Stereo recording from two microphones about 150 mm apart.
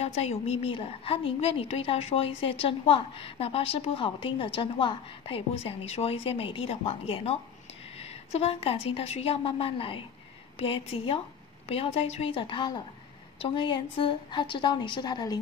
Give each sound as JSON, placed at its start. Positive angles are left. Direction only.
{"t": 0.0, "sound": "a woman's voice", "side_deg": 45}